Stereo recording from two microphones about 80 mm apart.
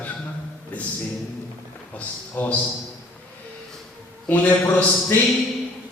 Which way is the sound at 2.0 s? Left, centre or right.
Left.